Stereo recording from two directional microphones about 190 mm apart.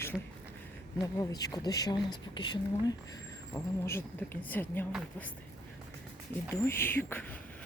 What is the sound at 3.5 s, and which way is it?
A woman's voice, 15° left (ahead or behind).